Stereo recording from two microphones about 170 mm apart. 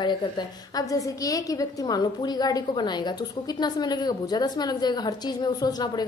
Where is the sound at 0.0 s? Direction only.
25° left (ahead or behind).